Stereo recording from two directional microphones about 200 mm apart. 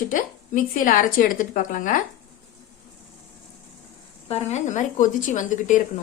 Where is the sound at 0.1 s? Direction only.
40° left (ahead or behind).